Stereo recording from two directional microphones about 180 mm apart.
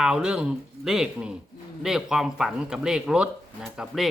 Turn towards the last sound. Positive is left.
turn(degrees=-5)  # may be behind; listen again after turning